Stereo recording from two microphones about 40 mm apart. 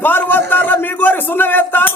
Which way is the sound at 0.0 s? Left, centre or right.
Left.